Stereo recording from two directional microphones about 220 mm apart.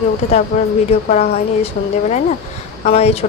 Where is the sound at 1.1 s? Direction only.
30° left (ahead or behind).